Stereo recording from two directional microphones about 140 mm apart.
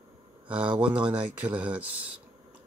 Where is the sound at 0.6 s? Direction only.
35° right (ahead or behind).